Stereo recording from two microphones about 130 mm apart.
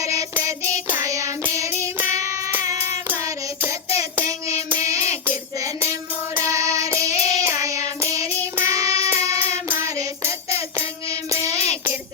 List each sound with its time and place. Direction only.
0.0 s child singing: 25° right (ahead or behind)
2.1 s music: 25° right (ahead or behind)
2.6 s child singing: 20° right (ahead or behind)
9.0 s music: 20° right (ahead or behind)
11.4 s music: 55° left (ahead or behind)